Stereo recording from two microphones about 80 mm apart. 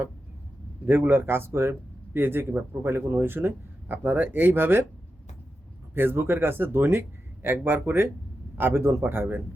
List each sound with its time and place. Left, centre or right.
0.9 s speech: right
5.9 s speech: right